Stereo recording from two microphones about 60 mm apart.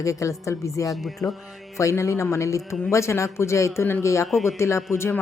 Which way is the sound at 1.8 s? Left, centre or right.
Left.